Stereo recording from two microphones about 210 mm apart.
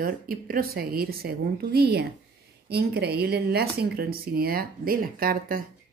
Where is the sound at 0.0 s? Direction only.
45° right (ahead or behind).